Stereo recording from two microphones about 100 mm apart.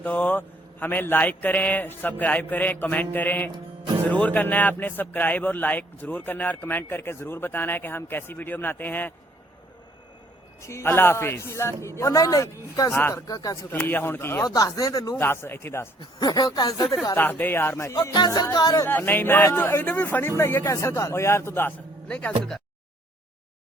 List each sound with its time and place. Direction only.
0.0 s a man's voice: 15° left (ahead or behind)
10.6 s speech: 30° left (ahead or behind)
12.9 s speech: 25° left (ahead or behind)
13.2 s speech: 35° left (ahead or behind)
13.7 s speech: 20° left (ahead or behind)
14.4 s speech: 40° left (ahead or behind)
15.2 s speech: 25° left (ahead or behind)
16.0 s speech: 45° left (ahead or behind)
17.2 s speech: 20° left (ahead or behind)
18.3 s speech: 35° left (ahead or behind)
18.9 s speech: 20° left (ahead or behind)
22.0 s speech: 10° left (ahead or behind)